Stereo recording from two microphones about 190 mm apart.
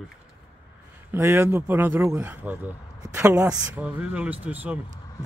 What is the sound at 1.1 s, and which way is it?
Speech, 10° right (ahead or behind).